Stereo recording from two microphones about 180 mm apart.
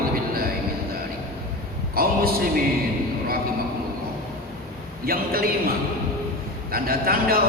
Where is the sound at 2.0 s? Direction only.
55° right (ahead or behind).